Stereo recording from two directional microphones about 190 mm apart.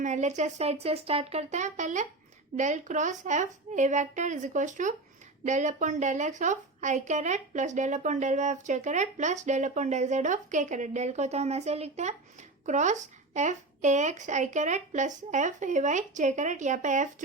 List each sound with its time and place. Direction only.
0.0 s speech: 40° right (ahead or behind)